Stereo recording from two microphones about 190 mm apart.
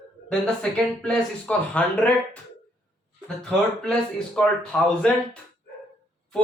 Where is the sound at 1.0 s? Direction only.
5° left (ahead or behind).